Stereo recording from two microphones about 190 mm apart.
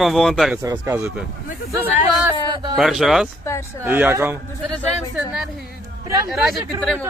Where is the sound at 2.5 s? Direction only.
20° right (ahead or behind).